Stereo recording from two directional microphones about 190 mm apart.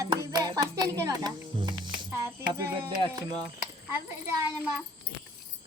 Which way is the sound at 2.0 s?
10° right (ahead or behind).